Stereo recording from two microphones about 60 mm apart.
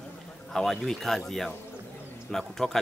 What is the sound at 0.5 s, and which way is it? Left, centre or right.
Speech, centre.